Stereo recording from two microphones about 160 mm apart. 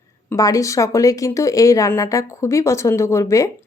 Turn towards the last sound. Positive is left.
turn(degrees=20)  # may be behind; listen again after turning